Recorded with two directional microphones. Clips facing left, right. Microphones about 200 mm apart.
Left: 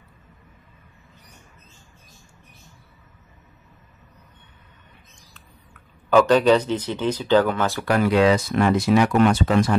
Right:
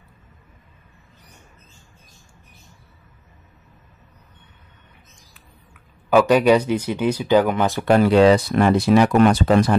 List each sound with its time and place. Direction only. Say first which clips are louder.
5.3 s speech: even; 10° right (ahead or behind)
8.0 s speech: right 3 dB; 30° right (ahead or behind)